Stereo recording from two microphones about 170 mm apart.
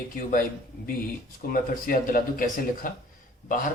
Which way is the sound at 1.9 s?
55° left (ahead or behind).